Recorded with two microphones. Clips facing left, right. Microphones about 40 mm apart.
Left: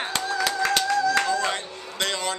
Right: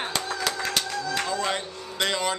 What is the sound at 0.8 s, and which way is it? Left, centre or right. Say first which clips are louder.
Music: left 7 dB; left.